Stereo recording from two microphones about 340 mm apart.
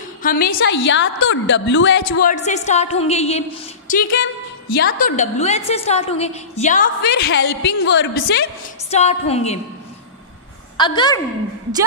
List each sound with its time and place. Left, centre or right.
0.2 s a woman's voice: left
2.1 s a woman's voice: left
8.9 s a woman's voice: centre
10.8 s a woman's voice: centre